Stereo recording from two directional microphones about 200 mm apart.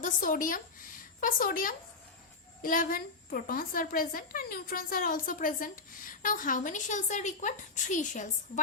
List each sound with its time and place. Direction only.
0.0 s a woman's voice: 40° left (ahead or behind)